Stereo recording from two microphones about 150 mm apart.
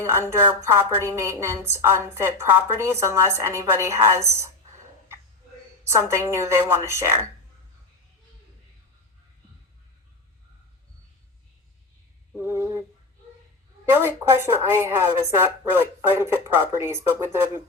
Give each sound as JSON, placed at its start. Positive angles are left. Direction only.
{"t": 0.0, "sound": "a woman's voice", "side_deg": -20}
{"t": 5.8, "sound": "a woman's voice", "side_deg": -20}
{"t": 12.4, "sound": "a sound", "side_deg": -15}
{"t": 13.9, "sound": "a woman's voice", "side_deg": -15}